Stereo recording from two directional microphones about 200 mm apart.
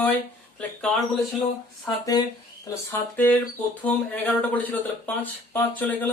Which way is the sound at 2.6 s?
10° left (ahead or behind).